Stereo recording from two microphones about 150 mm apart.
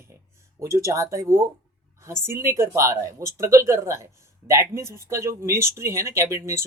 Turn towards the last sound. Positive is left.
turn(degrees=-20)  # may be behind; listen again after turning